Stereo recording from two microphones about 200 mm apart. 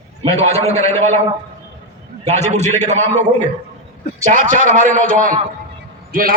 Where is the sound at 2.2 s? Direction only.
35° right (ahead or behind).